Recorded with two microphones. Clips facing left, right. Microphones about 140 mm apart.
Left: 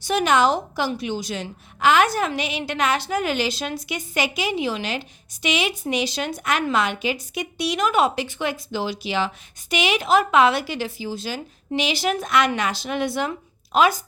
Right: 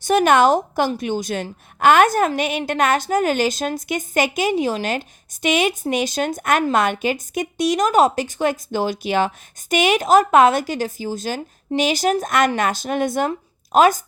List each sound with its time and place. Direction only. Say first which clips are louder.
0.0 s a woman's voice: right 4 dB; 50° right (ahead or behind)